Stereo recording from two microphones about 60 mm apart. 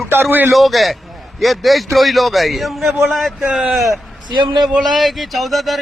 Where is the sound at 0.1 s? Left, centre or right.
Right.